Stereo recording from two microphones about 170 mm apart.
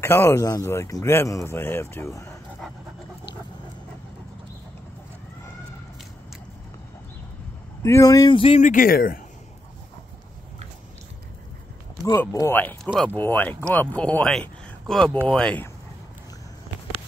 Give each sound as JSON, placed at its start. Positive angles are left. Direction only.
{"t": 0.0, "sound": "speech", "side_deg": 15}
{"t": 7.8, "sound": "speech", "side_deg": 20}
{"t": 8.4, "sound": "speech", "side_deg": 30}
{"t": 8.6, "sound": "speech", "side_deg": 55}
{"t": 12.0, "sound": "speech", "side_deg": 20}